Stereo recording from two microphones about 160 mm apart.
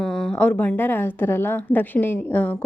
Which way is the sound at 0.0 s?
5° left (ahead or behind).